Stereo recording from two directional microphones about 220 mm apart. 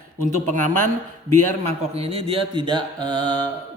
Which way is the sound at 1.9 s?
25° right (ahead or behind).